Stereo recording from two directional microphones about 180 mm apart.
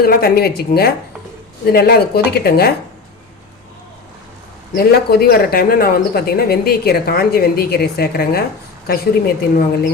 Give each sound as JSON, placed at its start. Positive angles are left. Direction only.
{"t": 0.0, "sound": "speech", "side_deg": 60}
{"t": 4.7, "sound": "speech", "side_deg": 60}